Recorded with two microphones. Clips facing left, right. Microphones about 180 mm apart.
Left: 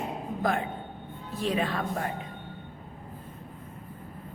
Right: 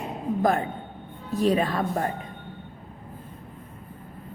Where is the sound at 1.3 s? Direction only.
40° right (ahead or behind).